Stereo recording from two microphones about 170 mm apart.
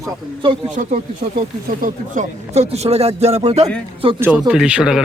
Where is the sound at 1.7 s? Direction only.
55° right (ahead or behind); by 3.6 s 35° right (ahead or behind).